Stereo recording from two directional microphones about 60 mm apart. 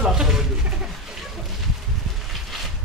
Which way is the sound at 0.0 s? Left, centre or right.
Centre.